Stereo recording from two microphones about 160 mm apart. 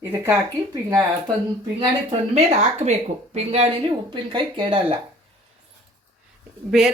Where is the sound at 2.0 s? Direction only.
40° right (ahead or behind).